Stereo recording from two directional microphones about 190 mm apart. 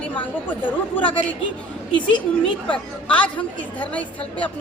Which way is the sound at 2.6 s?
5° left (ahead or behind).